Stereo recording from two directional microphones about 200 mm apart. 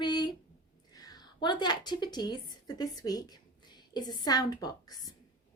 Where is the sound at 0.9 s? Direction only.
20° left (ahead or behind).